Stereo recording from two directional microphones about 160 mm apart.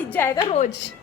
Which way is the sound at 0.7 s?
90° left.